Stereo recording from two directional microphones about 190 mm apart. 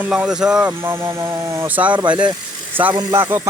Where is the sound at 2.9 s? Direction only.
20° right (ahead or behind).